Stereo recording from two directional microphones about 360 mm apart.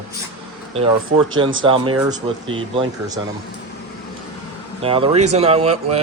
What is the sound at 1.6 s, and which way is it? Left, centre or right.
A man's voice, centre.